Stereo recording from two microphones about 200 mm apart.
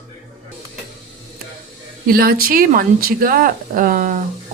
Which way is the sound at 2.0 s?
50° right (ahead or behind).